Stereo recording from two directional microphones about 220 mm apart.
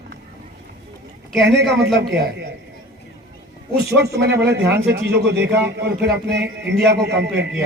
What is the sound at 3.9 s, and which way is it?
Speech, 45° right (ahead or behind).